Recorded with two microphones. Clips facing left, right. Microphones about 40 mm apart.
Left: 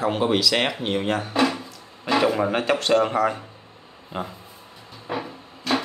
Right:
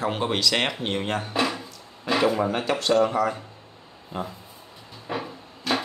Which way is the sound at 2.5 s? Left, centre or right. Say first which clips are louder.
Left 2 dB; left.